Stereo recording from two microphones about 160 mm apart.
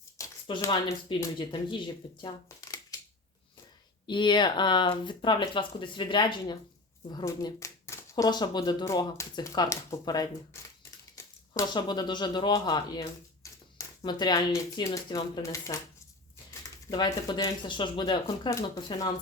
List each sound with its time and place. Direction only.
0.2 s a sound: 20° left (ahead or behind)
0.6 s speech: 25° left (ahead or behind)
2.2 s shuffling cards: 25° left (ahead or behind)
4.0 s speech: 30° left (ahead or behind)
16.9 s speech: 25° left (ahead or behind)